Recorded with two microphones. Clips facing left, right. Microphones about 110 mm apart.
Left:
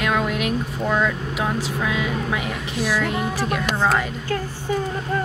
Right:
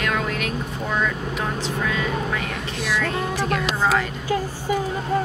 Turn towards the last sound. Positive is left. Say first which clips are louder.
# even
turn(degrees=0)  # may be behind; listen again after turning